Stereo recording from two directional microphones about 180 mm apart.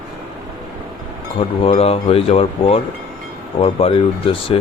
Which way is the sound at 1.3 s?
30° left (ahead or behind).